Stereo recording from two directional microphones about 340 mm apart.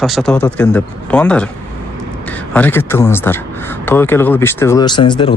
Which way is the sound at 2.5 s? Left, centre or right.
Centre.